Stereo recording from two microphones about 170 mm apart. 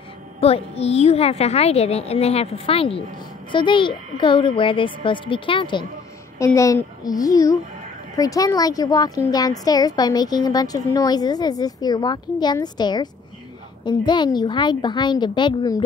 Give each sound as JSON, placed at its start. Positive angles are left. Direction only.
{"t": 0.4, "sound": "a woman's voice", "side_deg": 35}
{"t": 6.3, "sound": "a woman's voice", "side_deg": 20}